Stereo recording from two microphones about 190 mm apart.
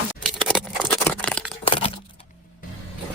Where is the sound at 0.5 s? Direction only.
5° right (ahead or behind).